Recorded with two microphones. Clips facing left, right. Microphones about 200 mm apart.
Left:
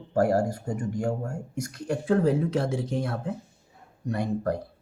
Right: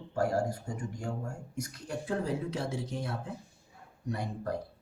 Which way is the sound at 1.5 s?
75° left (ahead or behind).